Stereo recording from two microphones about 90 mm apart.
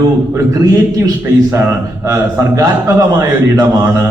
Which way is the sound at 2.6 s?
40° right (ahead or behind).